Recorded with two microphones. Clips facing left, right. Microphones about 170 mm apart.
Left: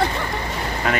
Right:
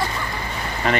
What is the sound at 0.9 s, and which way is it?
Speech, centre (ahead or behind).